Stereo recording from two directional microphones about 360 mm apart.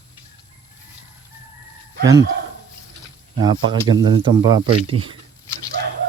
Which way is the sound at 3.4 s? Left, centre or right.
Centre.